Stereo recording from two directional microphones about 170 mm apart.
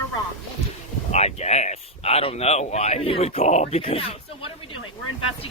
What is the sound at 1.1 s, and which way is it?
Speech, 40° left (ahead or behind).